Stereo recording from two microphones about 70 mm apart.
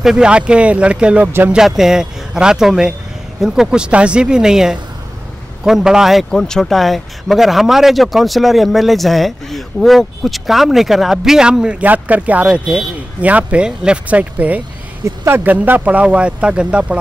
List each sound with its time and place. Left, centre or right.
0.0 s speech: centre
1.5 s speech: centre
11.8 s speech: right
15.0 s speech: right
15.4 s speech: right